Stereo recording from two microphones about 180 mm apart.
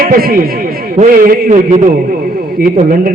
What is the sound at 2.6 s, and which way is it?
Speech, 50° right (ahead or behind).